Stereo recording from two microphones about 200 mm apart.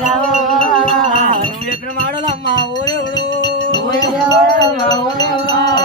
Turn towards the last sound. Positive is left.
turn(degrees=20)  # may be behind; listen again after turning